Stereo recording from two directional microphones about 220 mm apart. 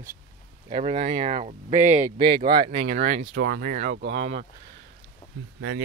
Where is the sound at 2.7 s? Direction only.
35° right (ahead or behind).